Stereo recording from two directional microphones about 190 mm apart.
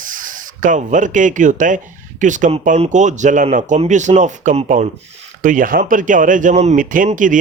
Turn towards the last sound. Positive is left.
turn(degrees=-45)  # may be behind; listen again after turning